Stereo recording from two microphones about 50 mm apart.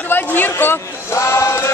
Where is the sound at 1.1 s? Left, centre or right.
Left.